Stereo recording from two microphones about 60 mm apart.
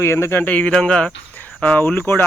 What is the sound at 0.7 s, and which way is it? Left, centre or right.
Speech, centre.